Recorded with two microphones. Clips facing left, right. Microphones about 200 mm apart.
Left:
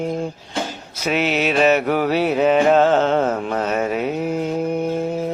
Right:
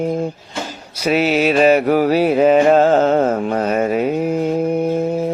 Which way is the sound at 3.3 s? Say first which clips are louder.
Right 4 dB; 40° right (ahead or behind).